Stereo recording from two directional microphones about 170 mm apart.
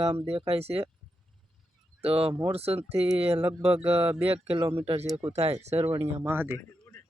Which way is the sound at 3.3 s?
15° right (ahead or behind).